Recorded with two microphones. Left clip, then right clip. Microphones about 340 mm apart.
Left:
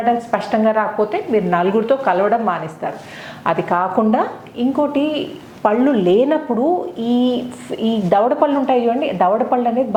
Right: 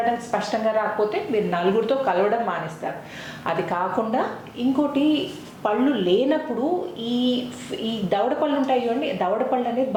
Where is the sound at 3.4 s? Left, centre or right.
Left.